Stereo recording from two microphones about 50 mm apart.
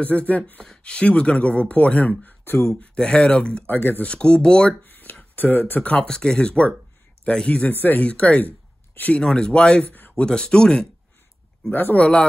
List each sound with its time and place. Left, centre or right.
0.0 s speech: left
2.8 s speech: left
3.6 s speech: left
4.0 s speech: left
4.8 s a sound: left
5.3 s speech: left
6.0 s speech: centre; by 9.2 s left
9.2 s speech: centre
11.7 s speech: left
12.0 s speech: centre